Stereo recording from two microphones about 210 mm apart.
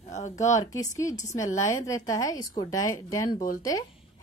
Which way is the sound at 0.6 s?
15° left (ahead or behind).